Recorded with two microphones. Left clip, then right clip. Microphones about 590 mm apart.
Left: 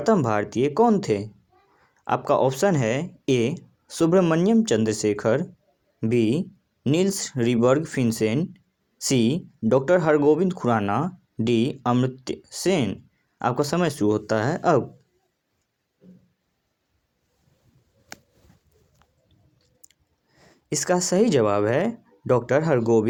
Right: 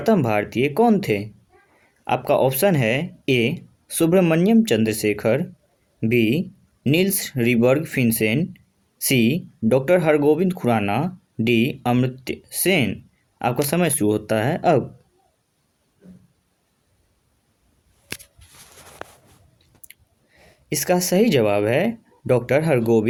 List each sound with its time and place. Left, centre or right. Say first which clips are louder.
0.0 s speech: right 2 dB; right
19.9 s speech: right 12 dB; right